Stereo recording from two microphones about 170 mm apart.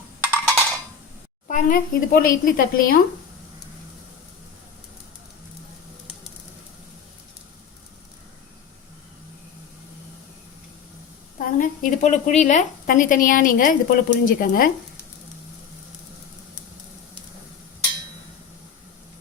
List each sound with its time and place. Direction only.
0.3 s percussion: 15° right (ahead or behind)
1.5 s speech: 50° left (ahead or behind)
11.3 s a woman's voice: 50° left (ahead or behind)